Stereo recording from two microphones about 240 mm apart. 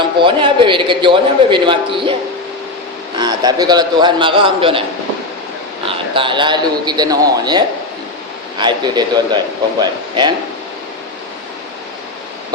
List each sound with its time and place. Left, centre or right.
0.2 s a man's voice: right
3.2 s a man's voice: centre
5.8 s a man's voice: right